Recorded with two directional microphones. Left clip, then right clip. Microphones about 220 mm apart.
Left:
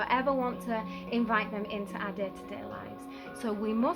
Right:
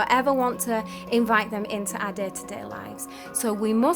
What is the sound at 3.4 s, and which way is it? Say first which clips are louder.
Speech: right 8 dB; 50° right (ahead or behind).